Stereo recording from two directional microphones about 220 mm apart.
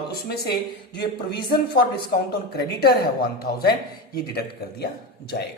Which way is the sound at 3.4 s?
45° left (ahead or behind).